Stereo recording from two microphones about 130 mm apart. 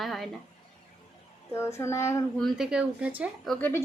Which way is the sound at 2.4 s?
Centre (ahead or behind).